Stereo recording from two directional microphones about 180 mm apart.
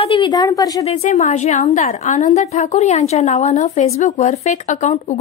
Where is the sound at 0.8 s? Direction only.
35° left (ahead or behind).